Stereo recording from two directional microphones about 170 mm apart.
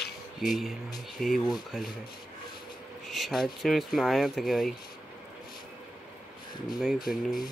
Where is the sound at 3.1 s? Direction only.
Centre (ahead or behind).